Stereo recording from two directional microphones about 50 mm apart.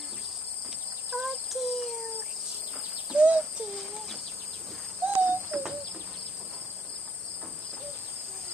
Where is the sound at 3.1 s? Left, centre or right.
Right.